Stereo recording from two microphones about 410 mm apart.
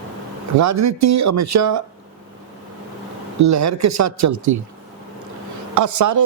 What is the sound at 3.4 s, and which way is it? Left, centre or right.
Speech, right.